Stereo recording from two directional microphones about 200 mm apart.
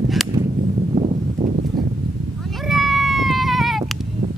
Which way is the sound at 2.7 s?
Centre (ahead or behind).